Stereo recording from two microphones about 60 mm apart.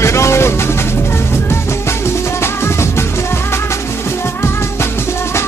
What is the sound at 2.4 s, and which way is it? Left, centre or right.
Music, left.